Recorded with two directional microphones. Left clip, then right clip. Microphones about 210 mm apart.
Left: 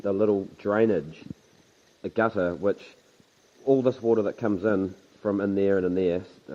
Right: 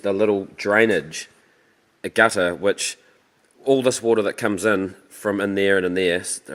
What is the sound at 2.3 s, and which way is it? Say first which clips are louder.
Speech: right 6 dB; 30° right (ahead or behind).